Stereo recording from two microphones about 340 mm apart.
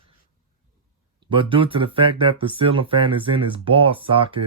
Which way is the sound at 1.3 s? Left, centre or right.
Centre.